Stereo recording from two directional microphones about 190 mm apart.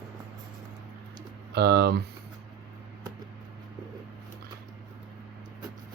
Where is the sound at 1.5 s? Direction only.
55° right (ahead or behind).